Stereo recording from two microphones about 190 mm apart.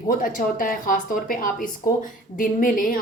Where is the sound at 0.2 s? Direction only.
45° left (ahead or behind).